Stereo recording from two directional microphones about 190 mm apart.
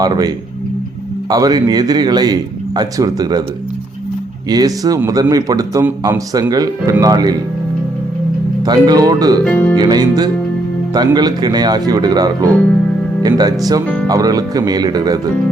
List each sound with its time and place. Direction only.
0.0 s speech: 20° right (ahead or behind)
4.4 s speech: 20° right (ahead or behind)
8.6 s speech: 20° right (ahead or behind)
9.4 s speech: 5° left (ahead or behind)
9.7 s speech: 20° right (ahead or behind)